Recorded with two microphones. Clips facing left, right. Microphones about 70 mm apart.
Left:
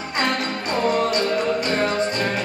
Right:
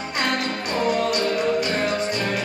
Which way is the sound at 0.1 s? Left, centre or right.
Left.